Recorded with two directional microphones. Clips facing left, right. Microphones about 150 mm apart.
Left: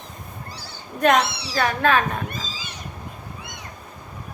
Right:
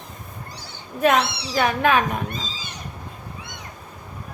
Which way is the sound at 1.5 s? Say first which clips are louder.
Right 3 dB; 20° right (ahead or behind).